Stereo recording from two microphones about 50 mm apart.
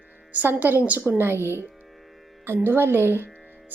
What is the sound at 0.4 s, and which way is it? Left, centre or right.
Speech, right.